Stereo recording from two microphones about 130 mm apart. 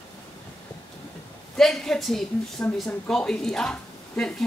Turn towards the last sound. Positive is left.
turn(degrees=5)  # may be behind; listen again after turning